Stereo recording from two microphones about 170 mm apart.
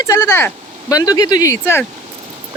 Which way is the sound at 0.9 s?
20° left (ahead or behind).